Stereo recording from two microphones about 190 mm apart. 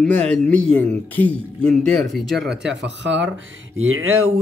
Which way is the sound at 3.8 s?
90° right.